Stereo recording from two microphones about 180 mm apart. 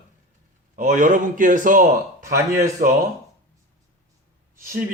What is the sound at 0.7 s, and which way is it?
A man's voice, 45° right (ahead or behind).